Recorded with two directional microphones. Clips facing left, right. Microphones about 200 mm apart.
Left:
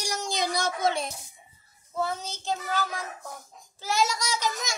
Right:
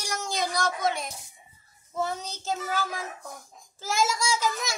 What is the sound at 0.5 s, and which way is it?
Speech, 25° left (ahead or behind).